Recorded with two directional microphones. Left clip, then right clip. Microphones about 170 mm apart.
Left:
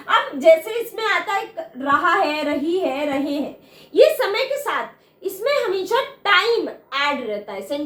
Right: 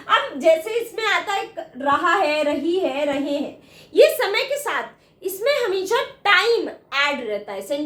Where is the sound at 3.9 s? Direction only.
20° right (ahead or behind).